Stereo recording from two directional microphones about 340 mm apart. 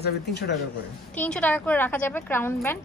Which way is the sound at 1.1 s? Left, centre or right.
Centre.